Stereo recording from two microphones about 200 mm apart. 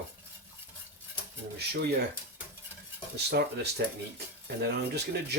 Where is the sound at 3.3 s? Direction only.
55° right (ahead or behind).